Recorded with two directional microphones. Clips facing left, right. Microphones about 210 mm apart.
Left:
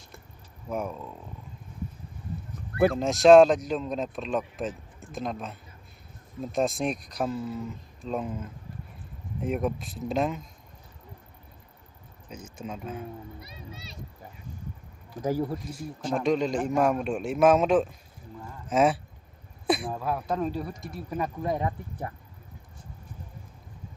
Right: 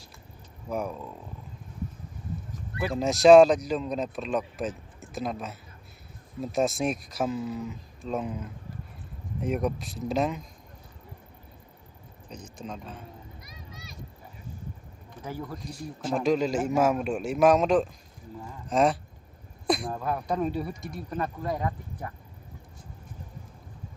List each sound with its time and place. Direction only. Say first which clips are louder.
0.7 s speech: even; centre (ahead or behind)
2.9 s speech: right 1 dB; centre (ahead or behind)
12.3 s speech: left 1 dB; 5° left (ahead or behind)
13.4 s speech: left 3 dB; 30° left (ahead or behind)
15.2 s a man's voice: left 9 dB; 35° left (ahead or behind)
15.7 s speech: even; centre (ahead or behind)
21.4 s speech: left 2 dB; 25° left (ahead or behind)